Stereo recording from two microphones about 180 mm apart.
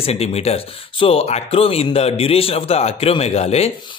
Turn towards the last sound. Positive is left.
turn(degrees=35)  # may be behind; listen again after turning